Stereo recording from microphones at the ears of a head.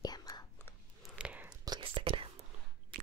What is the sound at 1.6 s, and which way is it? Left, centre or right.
Whispering, right.